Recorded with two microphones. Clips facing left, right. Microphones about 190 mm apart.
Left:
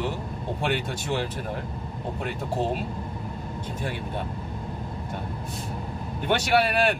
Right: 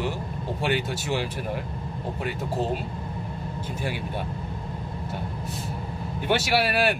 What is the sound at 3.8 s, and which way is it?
Speech, 10° right (ahead or behind).